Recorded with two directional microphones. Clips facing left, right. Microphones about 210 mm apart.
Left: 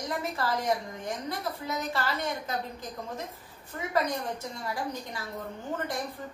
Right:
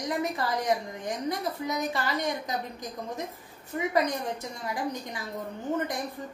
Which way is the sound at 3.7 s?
15° right (ahead or behind).